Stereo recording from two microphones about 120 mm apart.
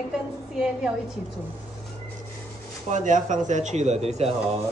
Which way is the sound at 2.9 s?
90° right.